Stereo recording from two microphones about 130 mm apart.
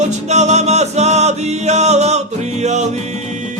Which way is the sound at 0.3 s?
60° right (ahead or behind).